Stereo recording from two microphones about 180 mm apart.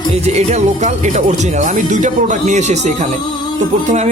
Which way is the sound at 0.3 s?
40° right (ahead or behind).